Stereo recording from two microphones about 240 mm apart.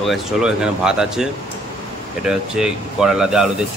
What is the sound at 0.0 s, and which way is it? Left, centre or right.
Speech, centre.